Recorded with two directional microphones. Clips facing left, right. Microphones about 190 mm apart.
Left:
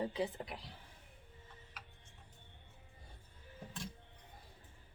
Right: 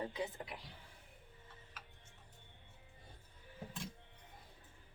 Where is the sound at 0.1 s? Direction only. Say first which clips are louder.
Left 4 dB; 30° left (ahead or behind).